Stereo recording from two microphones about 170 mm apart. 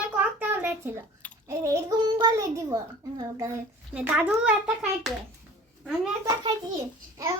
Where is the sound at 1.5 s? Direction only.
20° right (ahead or behind).